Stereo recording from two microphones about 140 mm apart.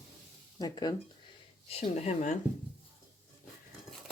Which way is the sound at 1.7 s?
50° left (ahead or behind).